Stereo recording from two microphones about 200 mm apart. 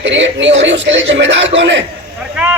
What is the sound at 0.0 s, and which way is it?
A man's voice, 65° right (ahead or behind).